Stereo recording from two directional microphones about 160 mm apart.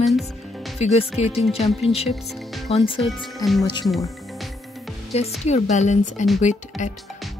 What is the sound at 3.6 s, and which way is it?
Speech, 30° left (ahead or behind).